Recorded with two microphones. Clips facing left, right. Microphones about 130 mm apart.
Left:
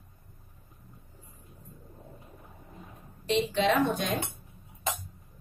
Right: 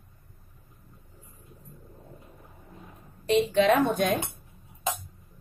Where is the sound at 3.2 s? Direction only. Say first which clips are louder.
Right 5 dB; 50° right (ahead or behind).